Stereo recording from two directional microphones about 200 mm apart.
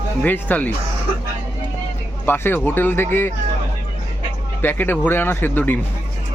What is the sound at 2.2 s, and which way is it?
Speech, 10° left (ahead or behind).